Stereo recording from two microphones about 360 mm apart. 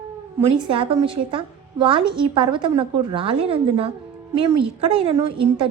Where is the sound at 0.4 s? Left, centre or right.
Centre.